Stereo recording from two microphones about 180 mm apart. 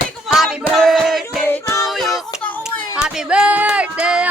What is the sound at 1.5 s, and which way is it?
Music, 10° left (ahead or behind).